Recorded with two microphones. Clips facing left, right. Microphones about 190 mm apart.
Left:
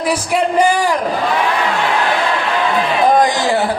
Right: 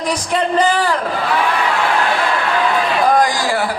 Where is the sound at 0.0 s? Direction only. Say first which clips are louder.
Left 2 dB; 10° left (ahead or behind).